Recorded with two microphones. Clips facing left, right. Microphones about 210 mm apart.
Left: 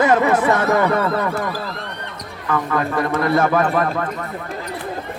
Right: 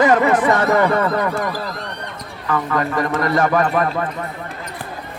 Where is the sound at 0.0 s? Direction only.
5° left (ahead or behind).